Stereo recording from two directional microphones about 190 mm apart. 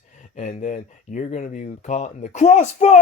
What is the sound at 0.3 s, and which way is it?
Speech, 40° left (ahead or behind).